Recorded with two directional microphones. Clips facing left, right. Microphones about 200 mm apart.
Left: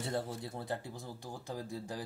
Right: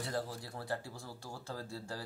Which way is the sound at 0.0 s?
25° left (ahead or behind).